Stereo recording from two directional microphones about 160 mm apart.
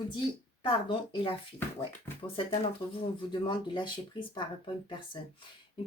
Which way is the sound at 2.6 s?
35° left (ahead or behind).